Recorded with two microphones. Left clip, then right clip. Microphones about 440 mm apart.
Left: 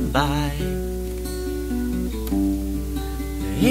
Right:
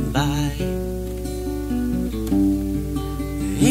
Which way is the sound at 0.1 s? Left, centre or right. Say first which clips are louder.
Left 2 dB; centre.